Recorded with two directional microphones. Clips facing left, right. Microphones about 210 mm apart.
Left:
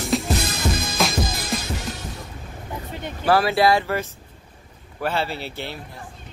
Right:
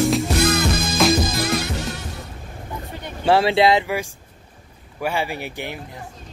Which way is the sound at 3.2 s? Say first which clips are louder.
Right 2 dB; 25° right (ahead or behind).